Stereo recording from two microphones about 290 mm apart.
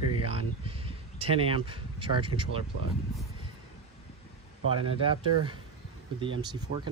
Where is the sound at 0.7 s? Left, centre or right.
Centre.